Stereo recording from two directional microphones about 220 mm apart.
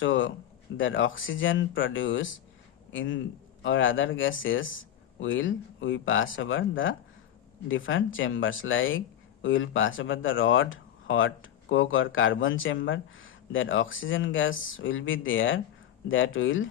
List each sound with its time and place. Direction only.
0.0 s speech: 60° left (ahead or behind)